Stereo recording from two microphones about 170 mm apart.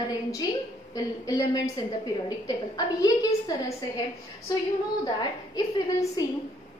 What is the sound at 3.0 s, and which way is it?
Speech, 20° left (ahead or behind).